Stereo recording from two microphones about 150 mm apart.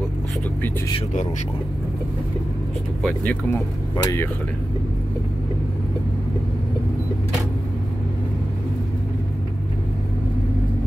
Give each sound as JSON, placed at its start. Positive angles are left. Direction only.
{"t": 3.5, "sound": "speech", "side_deg": 20}